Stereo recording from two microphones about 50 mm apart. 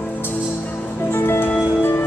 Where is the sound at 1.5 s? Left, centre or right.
Left.